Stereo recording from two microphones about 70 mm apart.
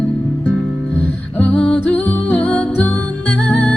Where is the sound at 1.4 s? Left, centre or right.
Centre.